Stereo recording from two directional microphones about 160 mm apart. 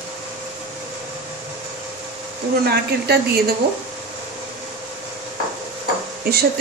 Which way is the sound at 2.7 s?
85° right.